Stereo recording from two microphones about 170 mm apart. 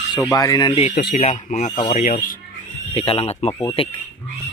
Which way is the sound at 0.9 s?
65° left (ahead or behind).